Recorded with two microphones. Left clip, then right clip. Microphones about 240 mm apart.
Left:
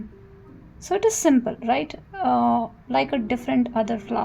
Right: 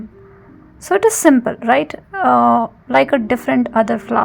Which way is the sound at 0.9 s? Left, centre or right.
Right.